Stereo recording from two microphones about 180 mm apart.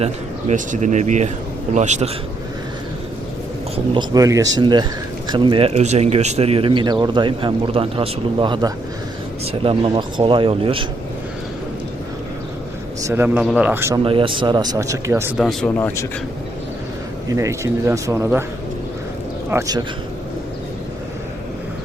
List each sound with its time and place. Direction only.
0.0 s speech: 40° right (ahead or behind)
3.9 s speech: 20° right (ahead or behind)
13.0 s speech: 15° right (ahead or behind)
14.0 s speech: 30° right (ahead or behind)
15.4 s speech: 5° left (ahead or behind)
17.2 s speech: 15° right (ahead or behind)
19.5 s speech: 20° right (ahead or behind)